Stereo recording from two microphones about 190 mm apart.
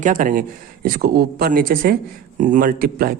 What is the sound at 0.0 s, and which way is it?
Speech, 45° right (ahead or behind).